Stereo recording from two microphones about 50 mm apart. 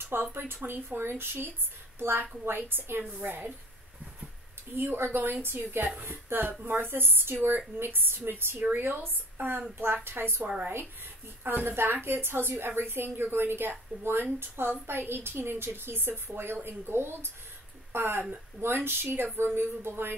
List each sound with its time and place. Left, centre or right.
0.1 s a woman's voice: right
3.0 s a woman's voice: right
4.7 s a woman's voice: right
5.9 s a woman's voice: right